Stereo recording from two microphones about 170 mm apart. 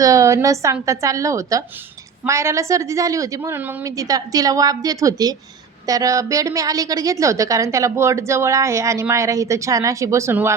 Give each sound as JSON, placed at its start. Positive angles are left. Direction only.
{"t": 0.0, "sound": "a woman's voice", "side_deg": -20}